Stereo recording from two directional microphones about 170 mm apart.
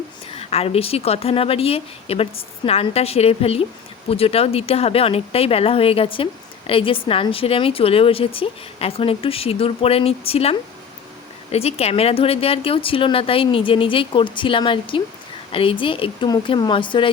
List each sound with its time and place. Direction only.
0.3 s a woman's voice: 35° left (ahead or behind)